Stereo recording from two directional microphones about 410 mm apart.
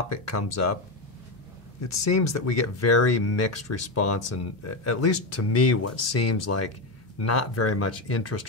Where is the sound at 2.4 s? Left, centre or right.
Left.